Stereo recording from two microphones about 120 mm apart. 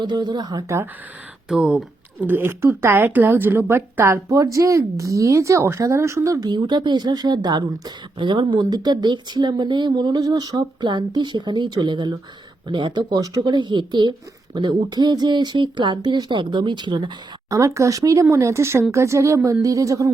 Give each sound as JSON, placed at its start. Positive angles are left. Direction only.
{"t": 0.0, "sound": "speech", "side_deg": -35}
{"t": 1.5, "sound": "speech", "side_deg": -5}
{"t": 2.2, "sound": "a woman's voice", "side_deg": -15}
{"t": 17.5, "sound": "a woman's voice", "side_deg": -25}